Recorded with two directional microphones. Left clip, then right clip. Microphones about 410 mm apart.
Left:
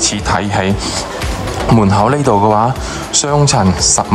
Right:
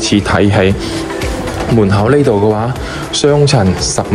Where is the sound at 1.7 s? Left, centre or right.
Centre.